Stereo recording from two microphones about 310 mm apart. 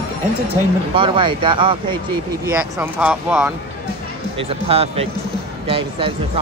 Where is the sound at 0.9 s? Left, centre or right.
Centre.